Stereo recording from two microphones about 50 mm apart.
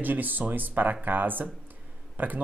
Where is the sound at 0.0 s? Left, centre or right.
Right.